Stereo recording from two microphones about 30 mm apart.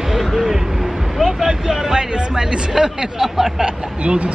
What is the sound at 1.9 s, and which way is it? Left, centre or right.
Speech, centre.